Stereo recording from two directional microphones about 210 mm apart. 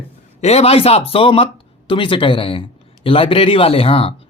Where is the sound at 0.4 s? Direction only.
30° left (ahead or behind).